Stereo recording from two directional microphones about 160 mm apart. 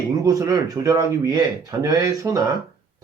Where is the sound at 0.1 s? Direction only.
20° right (ahead or behind).